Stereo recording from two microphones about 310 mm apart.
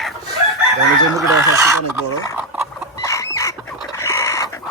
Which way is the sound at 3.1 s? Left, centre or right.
Centre.